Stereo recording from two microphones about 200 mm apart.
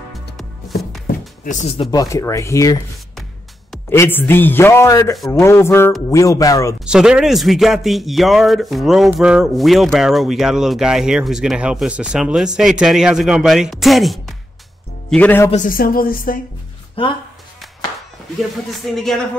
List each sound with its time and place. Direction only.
0.1 s music: centre (ahead or behind)
1.4 s speech: 40° left (ahead or behind); by 2.8 s 15° left (ahead or behind)
3.9 s speech: 10° left (ahead or behind)
6.9 s a man's voice: 5° right (ahead or behind)
15.5 s speech: 45° left (ahead or behind)
17.0 s speech: 25° left (ahead or behind)
18.4 s a man's voice: centre (ahead or behind)